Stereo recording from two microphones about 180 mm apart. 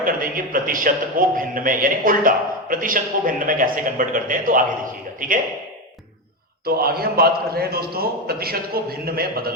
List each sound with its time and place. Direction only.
0.0 s speech: 50° right (ahead or behind)
6.7 s a man's voice: 60° right (ahead or behind)